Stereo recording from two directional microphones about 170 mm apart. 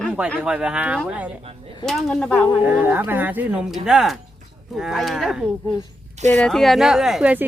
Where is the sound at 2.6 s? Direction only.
10° right (ahead or behind).